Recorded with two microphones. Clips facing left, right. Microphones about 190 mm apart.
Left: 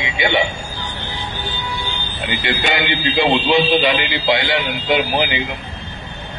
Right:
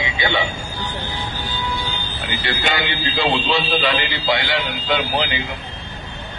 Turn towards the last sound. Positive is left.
turn(degrees=20)  # may be behind; listen again after turning